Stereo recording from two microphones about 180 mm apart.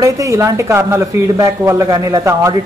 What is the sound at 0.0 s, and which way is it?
A man's voice, 15° right (ahead or behind).